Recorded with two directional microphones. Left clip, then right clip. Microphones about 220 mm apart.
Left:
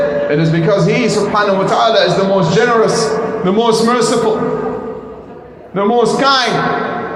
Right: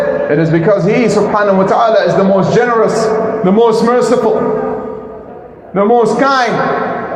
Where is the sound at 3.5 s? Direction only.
30° right (ahead or behind).